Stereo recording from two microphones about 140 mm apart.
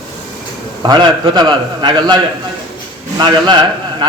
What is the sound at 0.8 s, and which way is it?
A man's voice, 30° right (ahead or behind).